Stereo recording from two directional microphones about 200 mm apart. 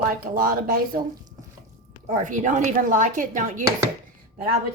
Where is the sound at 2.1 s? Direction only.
40° right (ahead or behind).